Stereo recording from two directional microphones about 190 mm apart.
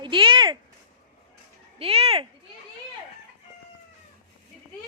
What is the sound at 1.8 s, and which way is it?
Speech, 30° right (ahead or behind).